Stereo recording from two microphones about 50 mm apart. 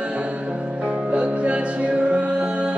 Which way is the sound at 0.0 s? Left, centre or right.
Right.